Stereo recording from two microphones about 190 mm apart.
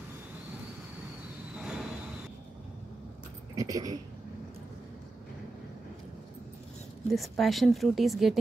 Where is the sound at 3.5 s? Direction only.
20° right (ahead or behind).